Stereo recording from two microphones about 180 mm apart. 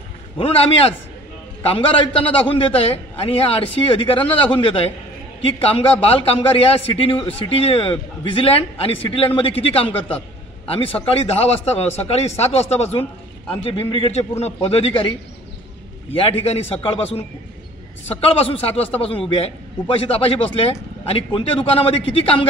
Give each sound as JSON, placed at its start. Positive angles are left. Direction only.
{"t": 0.4, "sound": "a man's voice", "side_deg": 30}
{"t": 16.2, "sound": "a man's voice", "side_deg": 35}